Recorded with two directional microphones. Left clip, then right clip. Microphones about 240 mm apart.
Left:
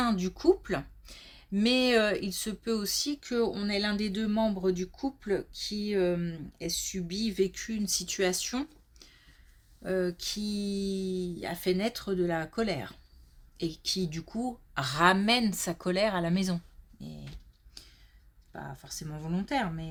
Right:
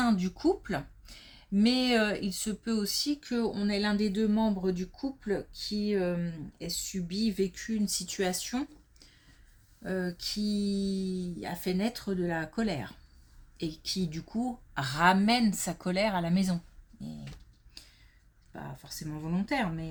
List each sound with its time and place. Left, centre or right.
0.0 s speech: left
17.8 s a sound: left
18.5 s speech: left